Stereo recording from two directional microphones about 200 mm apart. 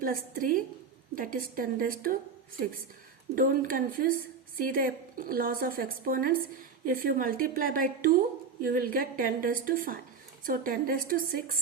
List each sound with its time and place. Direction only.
0.0 s a woman's voice: 45° right (ahead or behind)
3.3 s a woman's voice: 45° right (ahead or behind)